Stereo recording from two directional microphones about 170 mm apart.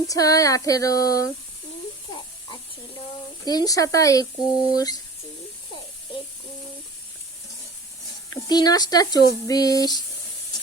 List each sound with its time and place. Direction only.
0.1 s speech: 20° left (ahead or behind)
3.4 s speech: 25° left (ahead or behind)
8.3 s speech: 25° left (ahead or behind)